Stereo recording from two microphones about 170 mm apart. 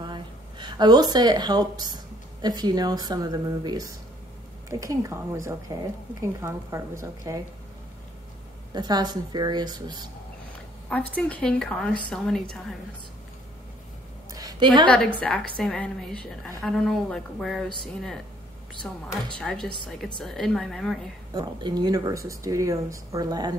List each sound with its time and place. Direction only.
0.0 s a sound: 25° right (ahead or behind)
2.4 s a woman's voice: 25° right (ahead or behind)
8.7 s speech: 25° right (ahead or behind)
10.9 s a woman's voice: 10° left (ahead or behind)
14.3 s a sound: 25° right (ahead or behind)
14.9 s a woman's voice: 5° left (ahead or behind)
18.9 s a woman's voice: 10° left (ahead or behind)
21.3 s speech: 25° right (ahead or behind)